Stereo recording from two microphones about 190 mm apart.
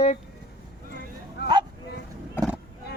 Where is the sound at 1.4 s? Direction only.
60° left (ahead or behind).